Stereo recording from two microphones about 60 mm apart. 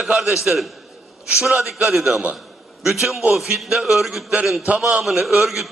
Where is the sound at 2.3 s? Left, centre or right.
Centre.